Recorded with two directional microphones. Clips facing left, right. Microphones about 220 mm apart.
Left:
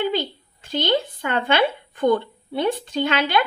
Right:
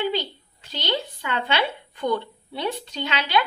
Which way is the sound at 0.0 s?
50° left (ahead or behind).